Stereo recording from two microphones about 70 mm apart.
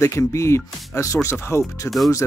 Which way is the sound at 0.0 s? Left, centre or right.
Left.